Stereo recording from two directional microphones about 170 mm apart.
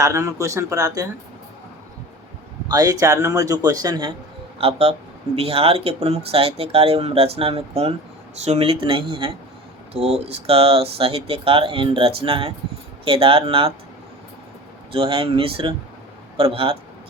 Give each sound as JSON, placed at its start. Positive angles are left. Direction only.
{"t": 0.0, "sound": "speech", "side_deg": -20}
{"t": 2.6, "sound": "a man's voice", "side_deg": -20}
{"t": 4.5, "sound": "speech", "side_deg": -35}
{"t": 14.9, "sound": "speech", "side_deg": -35}